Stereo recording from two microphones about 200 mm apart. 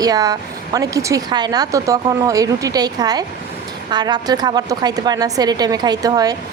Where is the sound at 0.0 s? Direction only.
20° right (ahead or behind).